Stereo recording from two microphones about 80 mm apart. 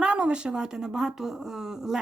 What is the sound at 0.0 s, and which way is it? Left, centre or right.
Speech, centre.